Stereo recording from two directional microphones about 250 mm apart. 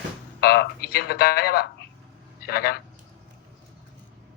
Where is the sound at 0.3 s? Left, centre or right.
Left.